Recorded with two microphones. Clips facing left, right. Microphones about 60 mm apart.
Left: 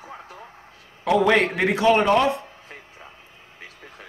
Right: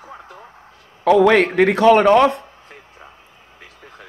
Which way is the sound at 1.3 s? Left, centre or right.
Right.